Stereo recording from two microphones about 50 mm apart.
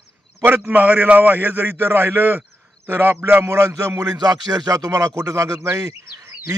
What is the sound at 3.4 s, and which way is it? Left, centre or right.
Music, right.